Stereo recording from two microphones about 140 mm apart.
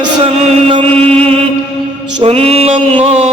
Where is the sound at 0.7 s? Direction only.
35° right (ahead or behind).